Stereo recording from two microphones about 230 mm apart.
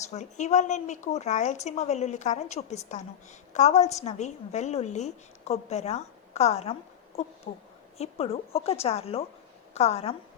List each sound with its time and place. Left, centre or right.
0.1 s a woman's voice: left